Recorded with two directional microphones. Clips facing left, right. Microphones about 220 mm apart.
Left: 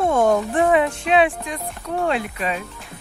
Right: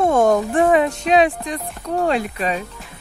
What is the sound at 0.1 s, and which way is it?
Speech, 45° right (ahead or behind).